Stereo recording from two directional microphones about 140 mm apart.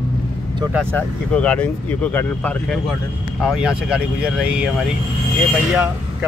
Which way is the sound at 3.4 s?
Centre (ahead or behind).